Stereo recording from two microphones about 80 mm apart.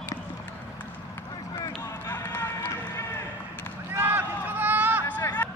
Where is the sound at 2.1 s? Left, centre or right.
Left.